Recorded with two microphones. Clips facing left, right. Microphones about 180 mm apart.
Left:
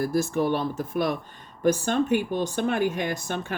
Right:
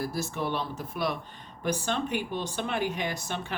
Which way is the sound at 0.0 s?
50° left (ahead or behind).